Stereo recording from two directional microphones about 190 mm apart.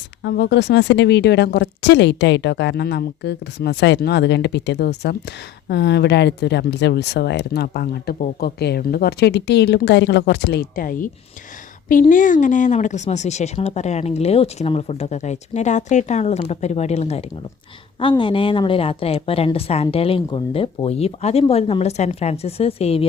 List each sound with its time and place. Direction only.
0.2 s a woman's voice: 60° left (ahead or behind); by 23.0 s 30° left (ahead or behind)